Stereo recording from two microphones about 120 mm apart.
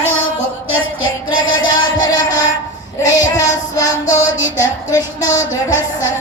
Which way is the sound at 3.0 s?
30° left (ahead or behind).